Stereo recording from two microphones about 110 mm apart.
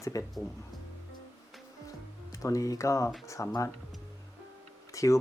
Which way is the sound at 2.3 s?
30° left (ahead or behind).